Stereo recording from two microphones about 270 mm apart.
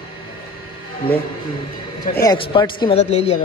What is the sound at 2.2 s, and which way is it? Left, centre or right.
A man's voice, centre.